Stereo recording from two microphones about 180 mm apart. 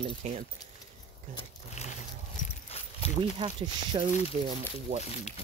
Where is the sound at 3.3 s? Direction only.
30° right (ahead or behind).